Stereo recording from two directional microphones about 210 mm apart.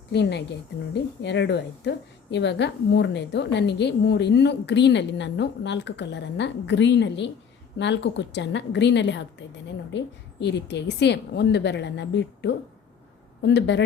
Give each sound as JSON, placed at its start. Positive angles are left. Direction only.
{"t": 0.1, "sound": "a woman's voice", "side_deg": 55}
{"t": 10.4, "sound": "a woman's voice", "side_deg": 55}